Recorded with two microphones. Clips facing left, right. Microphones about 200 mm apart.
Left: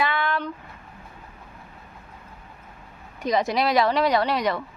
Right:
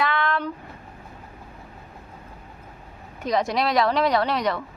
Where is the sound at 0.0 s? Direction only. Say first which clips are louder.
Right 1 dB; 5° left (ahead or behind).